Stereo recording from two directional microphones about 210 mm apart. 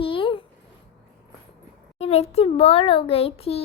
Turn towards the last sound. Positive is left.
turn(degrees=30)  # may be behind; listen again after turning